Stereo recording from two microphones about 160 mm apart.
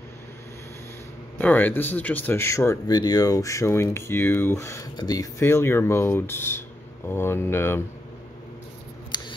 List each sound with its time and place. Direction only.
1.4 s speech: 10° left (ahead or behind)
9.1 s scissors: 30° left (ahead or behind)